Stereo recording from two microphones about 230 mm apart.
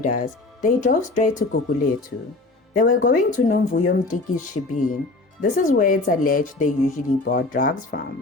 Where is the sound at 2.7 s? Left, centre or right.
Left.